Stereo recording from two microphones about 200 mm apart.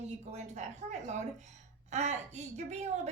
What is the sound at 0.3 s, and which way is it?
A woman's voice, 35° right (ahead or behind).